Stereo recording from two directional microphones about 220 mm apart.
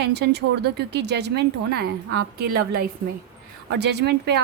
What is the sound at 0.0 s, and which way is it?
A woman's voice, 50° right (ahead or behind).